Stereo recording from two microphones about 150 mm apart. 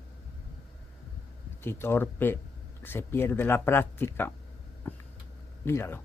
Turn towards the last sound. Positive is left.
turn(degrees=15)  # may be behind; listen again after turning